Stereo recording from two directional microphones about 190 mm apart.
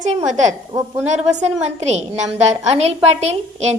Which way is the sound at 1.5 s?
35° right (ahead or behind).